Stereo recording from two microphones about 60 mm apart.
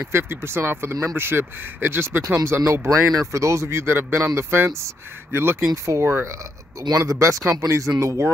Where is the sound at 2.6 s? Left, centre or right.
Right.